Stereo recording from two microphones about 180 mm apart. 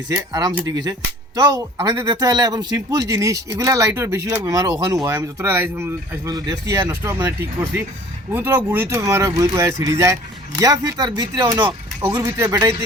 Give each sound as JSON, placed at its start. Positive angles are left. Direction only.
{"t": 0.6, "sound": "speech", "side_deg": -20}